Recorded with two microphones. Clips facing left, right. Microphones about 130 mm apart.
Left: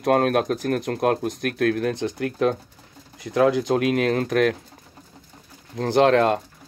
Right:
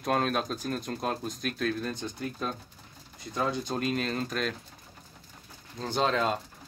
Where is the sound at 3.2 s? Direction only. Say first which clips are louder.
Left 12 dB; 85° left; by 4.5 s 65° left (ahead or behind).